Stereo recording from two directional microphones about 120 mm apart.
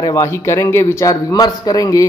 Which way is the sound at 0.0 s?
25° left (ahead or behind).